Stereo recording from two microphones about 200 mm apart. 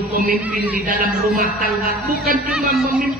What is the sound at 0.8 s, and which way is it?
Speech, 45° right (ahead or behind).